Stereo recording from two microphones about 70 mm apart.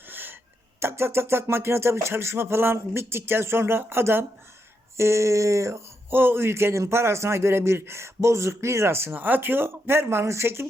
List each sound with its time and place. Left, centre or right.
0.1 s throat clearing: right
0.8 s a man's voice: right